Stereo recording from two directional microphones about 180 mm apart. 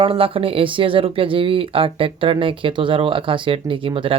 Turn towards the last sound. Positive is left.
turn(degrees=-30)  # may be behind; listen again after turning